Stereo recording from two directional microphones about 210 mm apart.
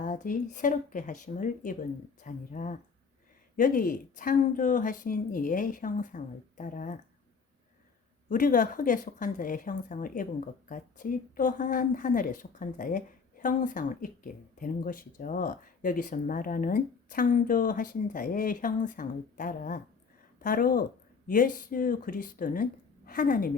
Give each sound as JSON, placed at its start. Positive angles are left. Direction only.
{"t": 0.0, "sound": "speech", "side_deg": 35}
{"t": 8.3, "sound": "a woman's voice", "side_deg": 40}